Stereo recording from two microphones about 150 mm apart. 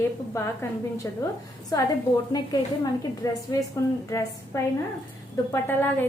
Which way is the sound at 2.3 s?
25° left (ahead or behind).